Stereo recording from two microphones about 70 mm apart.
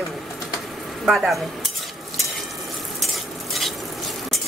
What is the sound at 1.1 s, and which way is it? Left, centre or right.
Speech, centre.